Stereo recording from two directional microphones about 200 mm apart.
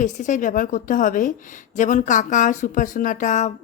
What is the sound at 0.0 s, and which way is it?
A woman's voice, 40° left (ahead or behind).